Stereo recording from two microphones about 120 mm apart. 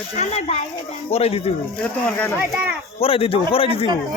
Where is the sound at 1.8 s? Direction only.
15° left (ahead or behind).